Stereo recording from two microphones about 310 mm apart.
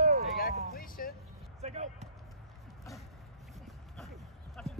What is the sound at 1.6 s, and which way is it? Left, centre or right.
Basketball bounce, right.